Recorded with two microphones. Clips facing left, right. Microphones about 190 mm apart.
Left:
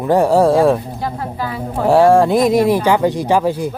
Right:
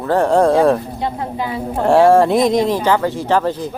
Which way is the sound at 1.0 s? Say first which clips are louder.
Right 1 dB; 20° right (ahead or behind).